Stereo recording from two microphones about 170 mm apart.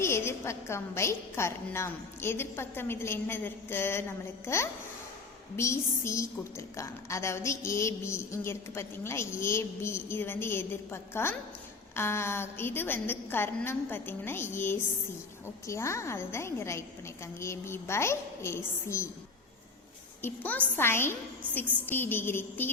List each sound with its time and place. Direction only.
0.0 s a woman's voice: 15° left (ahead or behind)
20.2 s a woman's voice: 10° left (ahead or behind)